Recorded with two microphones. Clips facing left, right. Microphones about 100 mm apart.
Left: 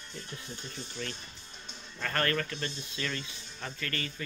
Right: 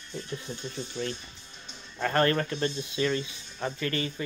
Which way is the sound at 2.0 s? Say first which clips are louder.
Right 6 dB; 25° right (ahead or behind).